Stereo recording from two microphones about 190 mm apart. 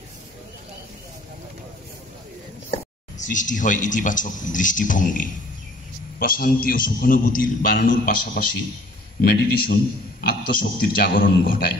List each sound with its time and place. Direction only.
2.7 s a man's voice: 40° left (ahead or behind)
9.2 s a man's voice: 55° left (ahead or behind)